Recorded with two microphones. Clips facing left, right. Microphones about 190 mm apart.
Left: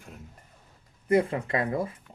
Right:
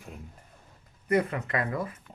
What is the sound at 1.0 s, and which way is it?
Speech, 25° left (ahead or behind).